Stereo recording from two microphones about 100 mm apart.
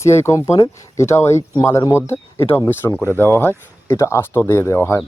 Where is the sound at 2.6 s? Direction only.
20° left (ahead or behind).